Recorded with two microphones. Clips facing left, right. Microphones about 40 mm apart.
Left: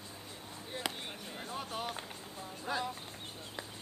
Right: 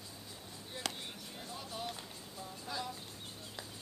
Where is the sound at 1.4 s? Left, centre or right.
Left.